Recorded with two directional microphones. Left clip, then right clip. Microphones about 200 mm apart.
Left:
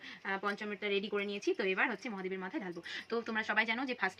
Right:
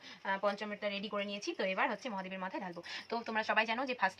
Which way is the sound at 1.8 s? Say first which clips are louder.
Even; 20° right (ahead or behind).